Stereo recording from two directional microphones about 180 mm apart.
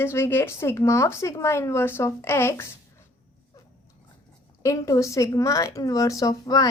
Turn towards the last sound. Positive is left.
turn(degrees=20)  # may be behind; listen again after turning